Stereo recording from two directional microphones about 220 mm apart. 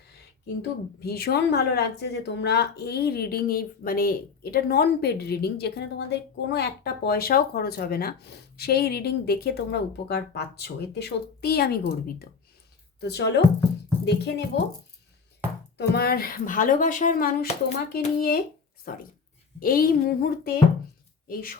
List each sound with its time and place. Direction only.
1.0 s a woman's voice: 45° left (ahead or behind)
13.0 s a woman's voice: 50° left (ahead or behind)
15.8 s a woman's voice: 45° left (ahead or behind)